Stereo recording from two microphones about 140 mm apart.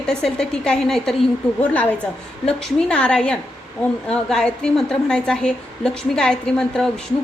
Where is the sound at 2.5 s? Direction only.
5° left (ahead or behind).